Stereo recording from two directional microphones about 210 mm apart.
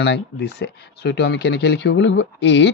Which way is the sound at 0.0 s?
55° left (ahead or behind).